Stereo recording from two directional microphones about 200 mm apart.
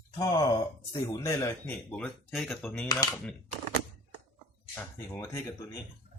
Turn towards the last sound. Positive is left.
turn(degrees=15)  # may be behind; listen again after turning